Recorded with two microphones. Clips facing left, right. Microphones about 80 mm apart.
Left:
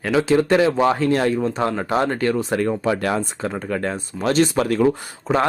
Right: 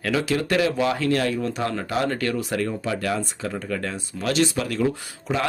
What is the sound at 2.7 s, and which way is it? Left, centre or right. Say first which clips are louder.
Speech: left 5 dB; left.